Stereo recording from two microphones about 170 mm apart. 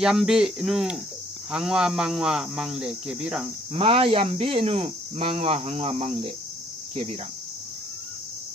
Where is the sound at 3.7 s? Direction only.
30° right (ahead or behind).